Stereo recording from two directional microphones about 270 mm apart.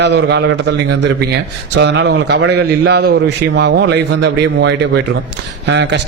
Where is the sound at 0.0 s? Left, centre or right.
Right.